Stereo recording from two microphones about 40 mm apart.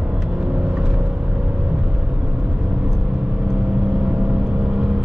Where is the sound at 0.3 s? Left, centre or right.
Right.